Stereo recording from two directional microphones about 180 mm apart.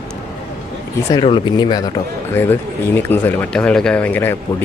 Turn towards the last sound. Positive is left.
turn(degrees=10)  # may be behind; listen again after turning